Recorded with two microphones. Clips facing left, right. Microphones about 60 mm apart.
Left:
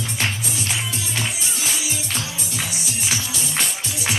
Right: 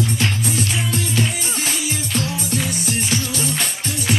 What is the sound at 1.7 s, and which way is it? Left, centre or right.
Music, right.